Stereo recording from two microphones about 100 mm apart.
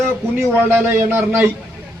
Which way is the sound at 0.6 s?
25° right (ahead or behind).